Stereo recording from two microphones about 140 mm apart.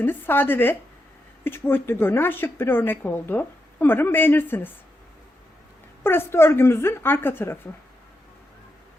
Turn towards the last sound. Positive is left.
turn(degrees=15)  # may be behind; listen again after turning